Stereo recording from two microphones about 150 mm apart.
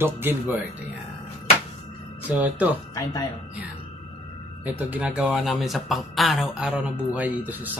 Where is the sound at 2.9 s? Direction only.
25° left (ahead or behind).